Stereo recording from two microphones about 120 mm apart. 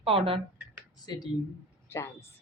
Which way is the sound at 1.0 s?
35° left (ahead or behind).